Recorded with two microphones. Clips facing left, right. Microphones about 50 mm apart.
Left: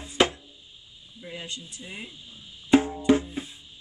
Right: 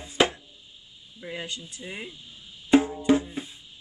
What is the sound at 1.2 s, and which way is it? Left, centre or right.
Speech, right.